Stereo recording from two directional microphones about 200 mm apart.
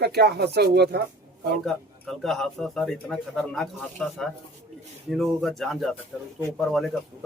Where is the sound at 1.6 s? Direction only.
Centre (ahead or behind).